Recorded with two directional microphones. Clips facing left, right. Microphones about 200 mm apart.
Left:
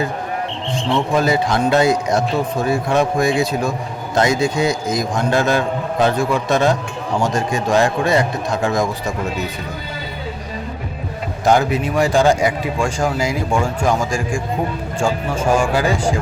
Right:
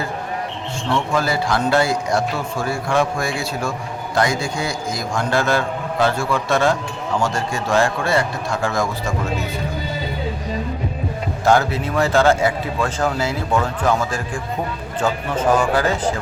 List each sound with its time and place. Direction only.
0.9 s a man's voice: 20° left (ahead or behind)
11.4 s speech: 15° left (ahead or behind)